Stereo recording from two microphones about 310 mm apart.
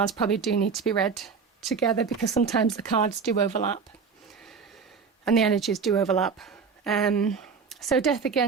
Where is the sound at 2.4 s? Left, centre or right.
Left.